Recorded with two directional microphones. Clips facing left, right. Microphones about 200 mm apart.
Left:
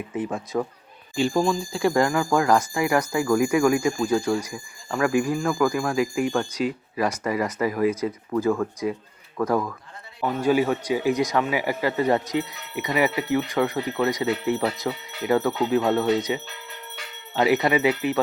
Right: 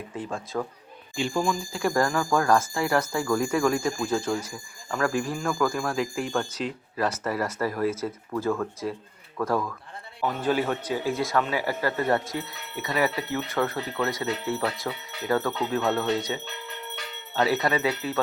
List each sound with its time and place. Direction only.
0.1 s speech: 20° left (ahead or behind)
1.1 s speech: 40° left (ahead or behind)
2.0 s speech: 15° left (ahead or behind)
10.2 s speech: 5° left (ahead or behind)